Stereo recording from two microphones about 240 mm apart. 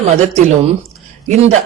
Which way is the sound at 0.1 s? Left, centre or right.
Right.